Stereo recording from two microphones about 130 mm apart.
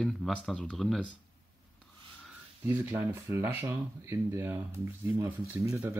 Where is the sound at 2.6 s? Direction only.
20° right (ahead or behind).